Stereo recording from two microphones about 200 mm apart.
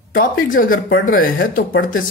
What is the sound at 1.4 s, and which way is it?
Speech, 70° left (ahead or behind).